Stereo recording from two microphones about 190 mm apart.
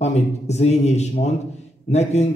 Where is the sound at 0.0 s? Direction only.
35° left (ahead or behind).